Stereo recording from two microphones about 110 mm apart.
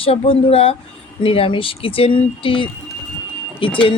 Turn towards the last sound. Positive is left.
turn(degrees=55)  # may be behind; listen again after turning